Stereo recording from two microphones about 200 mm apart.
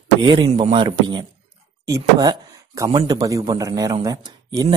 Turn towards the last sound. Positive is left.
turn(degrees=-15)  # may be behind; listen again after turning